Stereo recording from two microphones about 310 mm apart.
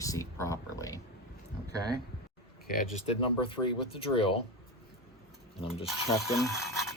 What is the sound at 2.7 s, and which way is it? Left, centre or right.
Speech, left.